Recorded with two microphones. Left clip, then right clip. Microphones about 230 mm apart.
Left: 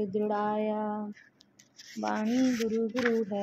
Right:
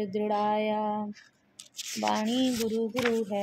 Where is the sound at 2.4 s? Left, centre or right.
Right.